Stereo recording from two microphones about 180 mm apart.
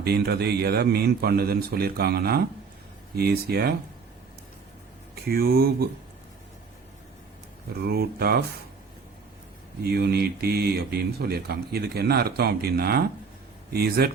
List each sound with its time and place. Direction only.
0.0 s speech: 65° right (ahead or behind)
5.2 s speech: 55° right (ahead or behind)
7.7 s speech: 60° right (ahead or behind)
9.8 s speech: 60° right (ahead or behind)